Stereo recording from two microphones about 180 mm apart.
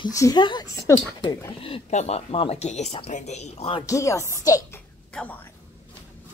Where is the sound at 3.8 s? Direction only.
15° left (ahead or behind).